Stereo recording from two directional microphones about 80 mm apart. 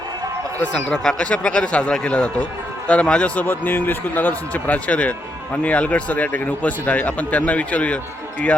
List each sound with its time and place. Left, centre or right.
0.6 s speech: centre
3.4 s speech: left